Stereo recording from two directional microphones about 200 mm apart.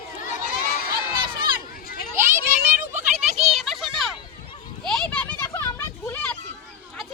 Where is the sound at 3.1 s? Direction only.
35° right (ahead or behind).